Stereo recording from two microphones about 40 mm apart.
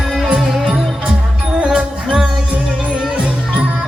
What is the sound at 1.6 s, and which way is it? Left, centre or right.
Music, right.